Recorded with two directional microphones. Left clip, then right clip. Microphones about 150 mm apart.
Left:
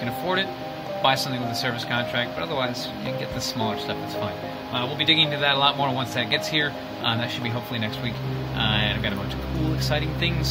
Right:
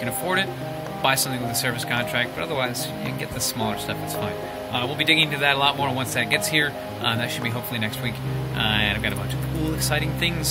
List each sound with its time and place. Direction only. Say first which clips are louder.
1.0 s a man's voice: even; 15° right (ahead or behind)
4.7 s a man's voice: right 1 dB; 15° right (ahead or behind)